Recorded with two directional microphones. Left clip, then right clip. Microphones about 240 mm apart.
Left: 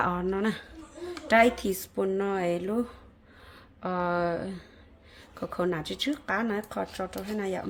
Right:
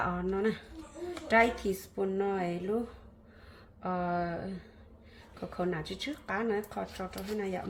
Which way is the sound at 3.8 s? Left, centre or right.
Left.